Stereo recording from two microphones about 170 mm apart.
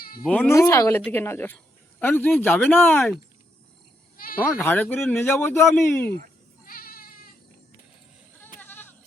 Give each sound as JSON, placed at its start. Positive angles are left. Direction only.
{"t": 0.3, "sound": "speech", "side_deg": 10}
{"t": 0.5, "sound": "speech", "side_deg": 20}
{"t": 4.6, "sound": "speech", "side_deg": 10}
{"t": 6.7, "sound": "goat", "side_deg": 60}
{"t": 8.5, "sound": "sheep", "side_deg": 10}